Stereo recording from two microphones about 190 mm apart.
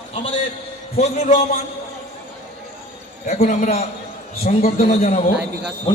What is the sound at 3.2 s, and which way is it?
A man's voice, 40° left (ahead or behind).